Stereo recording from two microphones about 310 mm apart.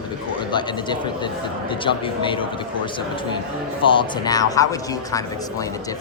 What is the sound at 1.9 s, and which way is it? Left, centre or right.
Speech, centre.